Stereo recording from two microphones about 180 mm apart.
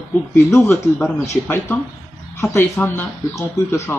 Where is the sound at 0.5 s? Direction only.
15° left (ahead or behind).